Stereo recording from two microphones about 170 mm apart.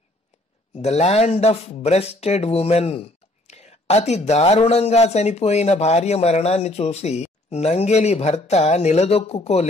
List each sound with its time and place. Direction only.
0.7 s speech: 40° left (ahead or behind)